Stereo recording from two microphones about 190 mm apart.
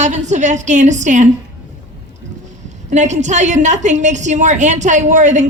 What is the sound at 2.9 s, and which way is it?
A woman's voice, 40° right (ahead or behind).